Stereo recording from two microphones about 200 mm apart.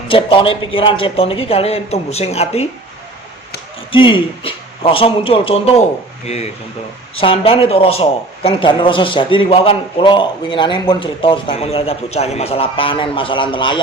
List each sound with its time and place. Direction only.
0.1 s a man's voice: 25° left (ahead or behind)
3.9 s a man's voice: 25° left (ahead or behind)